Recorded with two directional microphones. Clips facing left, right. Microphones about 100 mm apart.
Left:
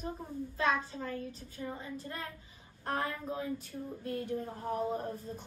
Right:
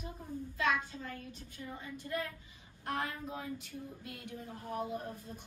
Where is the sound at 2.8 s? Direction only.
40° left (ahead or behind).